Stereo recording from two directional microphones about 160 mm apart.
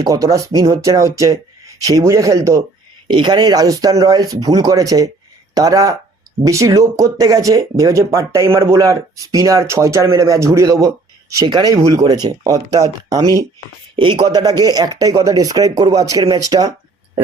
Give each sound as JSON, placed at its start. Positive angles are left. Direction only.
{"t": 0.0, "sound": "speech", "side_deg": -20}